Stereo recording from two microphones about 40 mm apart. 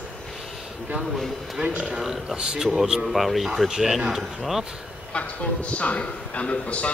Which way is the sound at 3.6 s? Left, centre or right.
Centre.